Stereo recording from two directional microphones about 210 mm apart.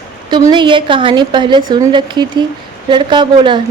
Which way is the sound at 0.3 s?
20° right (ahead or behind).